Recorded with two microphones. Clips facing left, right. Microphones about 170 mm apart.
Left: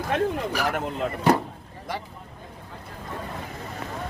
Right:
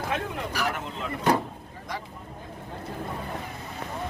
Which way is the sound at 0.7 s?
55° left (ahead or behind).